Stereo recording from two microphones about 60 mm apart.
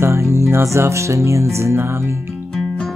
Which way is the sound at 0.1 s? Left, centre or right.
Right.